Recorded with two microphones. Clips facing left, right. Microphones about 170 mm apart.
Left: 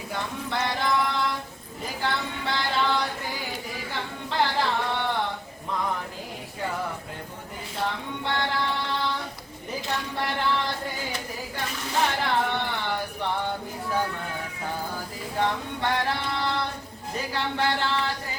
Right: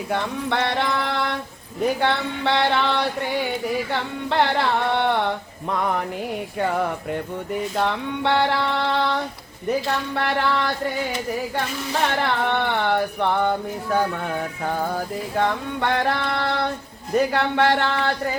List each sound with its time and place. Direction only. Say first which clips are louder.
0.1 s a sound: right 6 dB; 65° right (ahead or behind)
2.0 s music: right 7 dB; 65° right (ahead or behind)
3.9 s carnatic music: right 2 dB; 65° right (ahead or behind)
7.8 s music: right 4 dB; 70° right (ahead or behind)
12.2 s music: right 4 dB; 65° right (ahead or behind)
14.8 s music: right 8 dB; 60° right (ahead or behind)